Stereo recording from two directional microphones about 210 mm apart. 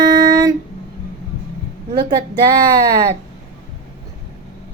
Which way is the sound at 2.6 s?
45° right (ahead or behind).